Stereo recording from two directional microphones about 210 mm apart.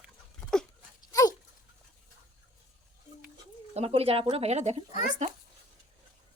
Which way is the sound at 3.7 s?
30° right (ahead or behind).